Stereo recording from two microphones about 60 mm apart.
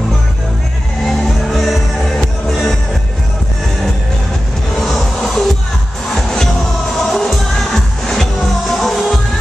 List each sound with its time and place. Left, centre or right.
1.0 s music: centre
4.7 s music: centre